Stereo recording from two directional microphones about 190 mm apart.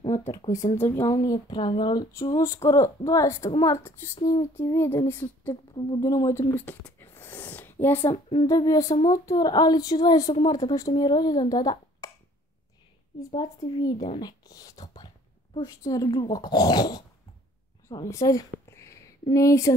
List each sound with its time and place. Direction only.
0.7 s speech: 15° left (ahead or behind)
13.3 s speech: 20° left (ahead or behind)
13.9 s speech: 30° left (ahead or behind)
14.2 s a woman's voice: 20° left (ahead or behind)